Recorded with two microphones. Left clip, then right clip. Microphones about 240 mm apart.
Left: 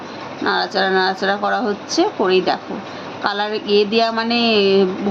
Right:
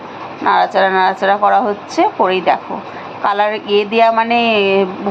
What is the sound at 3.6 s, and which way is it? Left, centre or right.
Speech, right.